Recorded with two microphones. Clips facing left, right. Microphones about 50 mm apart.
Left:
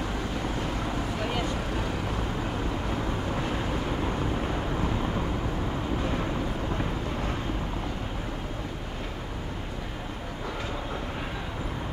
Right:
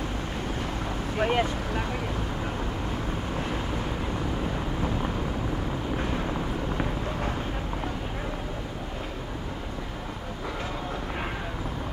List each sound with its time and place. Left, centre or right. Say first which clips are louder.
1.2 s speech: right 8 dB; right